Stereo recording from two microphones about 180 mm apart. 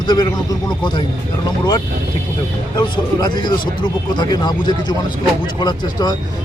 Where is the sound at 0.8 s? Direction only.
25° left (ahead or behind).